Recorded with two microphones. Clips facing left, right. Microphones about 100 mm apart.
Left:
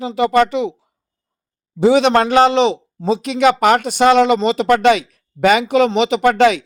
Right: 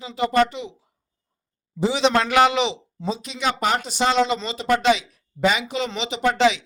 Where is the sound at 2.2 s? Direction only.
35° left (ahead or behind).